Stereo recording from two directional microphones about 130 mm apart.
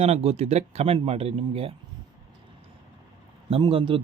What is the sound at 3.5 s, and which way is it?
Speech, 40° right (ahead or behind).